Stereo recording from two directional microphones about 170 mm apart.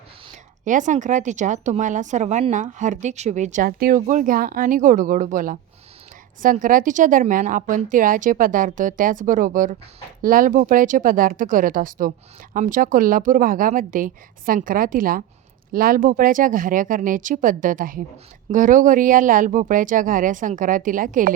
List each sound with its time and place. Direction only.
0.6 s a woman's voice: 50° right (ahead or behind)